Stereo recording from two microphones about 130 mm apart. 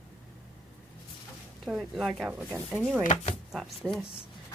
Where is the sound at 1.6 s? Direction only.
Centre (ahead or behind).